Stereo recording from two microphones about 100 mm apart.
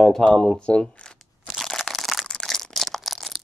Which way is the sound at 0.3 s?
5° left (ahead or behind).